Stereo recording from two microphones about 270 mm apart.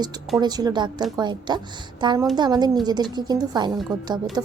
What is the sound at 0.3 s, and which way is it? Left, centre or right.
A woman's voice, centre.